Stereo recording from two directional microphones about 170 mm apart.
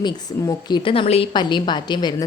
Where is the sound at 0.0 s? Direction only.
25° left (ahead or behind).